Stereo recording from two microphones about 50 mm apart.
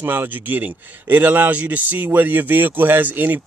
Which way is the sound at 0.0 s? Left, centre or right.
Right.